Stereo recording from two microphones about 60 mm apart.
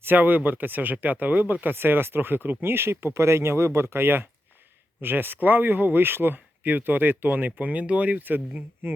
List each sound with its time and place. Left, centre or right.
0.0 s speech: right